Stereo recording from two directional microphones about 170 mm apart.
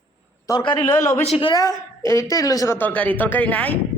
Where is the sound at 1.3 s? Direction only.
35° left (ahead or behind).